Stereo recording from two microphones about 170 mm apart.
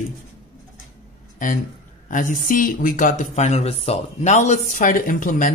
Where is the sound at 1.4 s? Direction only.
50° left (ahead or behind).